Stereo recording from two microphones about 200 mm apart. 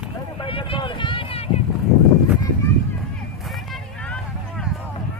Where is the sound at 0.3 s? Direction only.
25° left (ahead or behind).